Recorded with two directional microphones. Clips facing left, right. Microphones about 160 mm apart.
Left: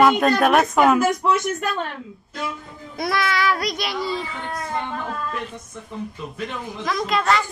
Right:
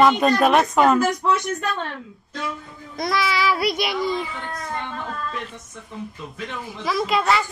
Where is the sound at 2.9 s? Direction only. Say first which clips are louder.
Even; centre (ahead or behind).